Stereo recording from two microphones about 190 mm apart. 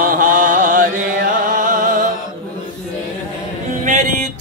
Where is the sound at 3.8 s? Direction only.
40° right (ahead or behind).